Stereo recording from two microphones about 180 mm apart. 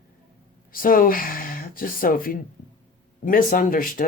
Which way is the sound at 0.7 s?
50° left (ahead or behind).